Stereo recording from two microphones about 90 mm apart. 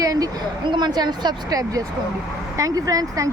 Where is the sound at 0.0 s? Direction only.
45° right (ahead or behind).